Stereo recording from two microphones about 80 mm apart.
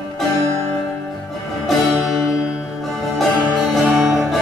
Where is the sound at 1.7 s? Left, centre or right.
Centre.